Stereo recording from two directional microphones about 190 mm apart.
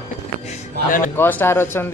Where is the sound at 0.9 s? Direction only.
45° left (ahead or behind).